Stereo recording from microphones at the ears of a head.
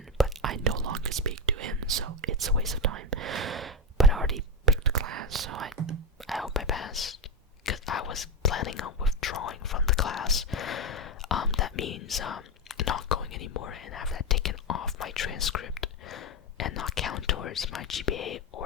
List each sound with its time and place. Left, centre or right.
0.4 s whispering: right
6.7 s whispering: left